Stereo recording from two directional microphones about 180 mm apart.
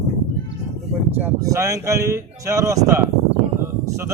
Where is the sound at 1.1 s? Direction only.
15° right (ahead or behind).